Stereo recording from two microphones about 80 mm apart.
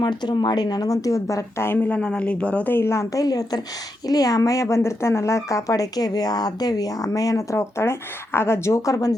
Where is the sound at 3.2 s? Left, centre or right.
Left.